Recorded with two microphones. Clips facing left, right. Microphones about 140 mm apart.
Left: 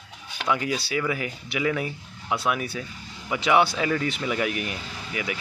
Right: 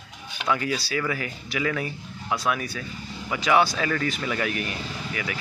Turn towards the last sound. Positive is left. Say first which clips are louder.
# even
turn(degrees=15)  # may be behind; listen again after turning